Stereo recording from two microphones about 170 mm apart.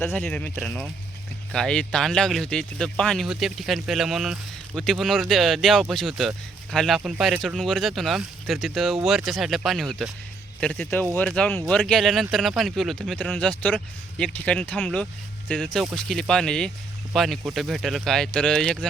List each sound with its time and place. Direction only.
0.0 s speech: 10° left (ahead or behind)